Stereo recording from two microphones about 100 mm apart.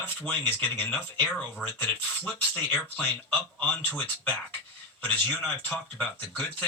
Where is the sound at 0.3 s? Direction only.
15° left (ahead or behind).